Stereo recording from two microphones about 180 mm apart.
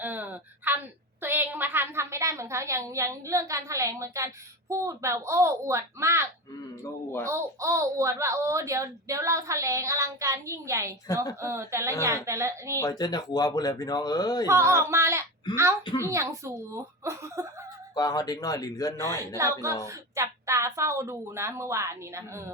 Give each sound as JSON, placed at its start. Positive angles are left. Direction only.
{"t": 0.0, "sound": "a sound", "side_deg": -10}
{"t": 1.2, "sound": "a woman's voice", "side_deg": -10}
{"t": 7.3, "sound": "speech", "side_deg": -15}
{"t": 12.8, "sound": "speech", "side_deg": 20}
{"t": 14.4, "sound": "speech", "side_deg": -15}
{"t": 17.9, "sound": "speech", "side_deg": 20}
{"t": 19.4, "sound": "speech", "side_deg": -15}